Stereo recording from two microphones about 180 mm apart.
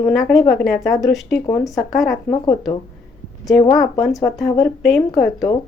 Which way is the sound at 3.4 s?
20° left (ahead or behind).